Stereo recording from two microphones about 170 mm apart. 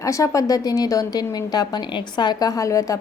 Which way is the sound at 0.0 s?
20° left (ahead or behind).